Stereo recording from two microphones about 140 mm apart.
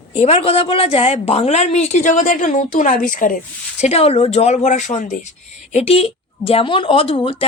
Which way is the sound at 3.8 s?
45° left (ahead or behind).